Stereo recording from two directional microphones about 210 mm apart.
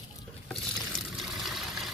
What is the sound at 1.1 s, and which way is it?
Water, centre (ahead or behind).